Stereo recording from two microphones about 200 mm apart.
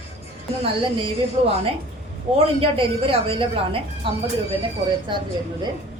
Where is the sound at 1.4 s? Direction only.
25° right (ahead or behind).